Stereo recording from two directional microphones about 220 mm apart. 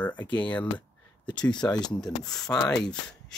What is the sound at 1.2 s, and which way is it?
Speech, 20° left (ahead or behind).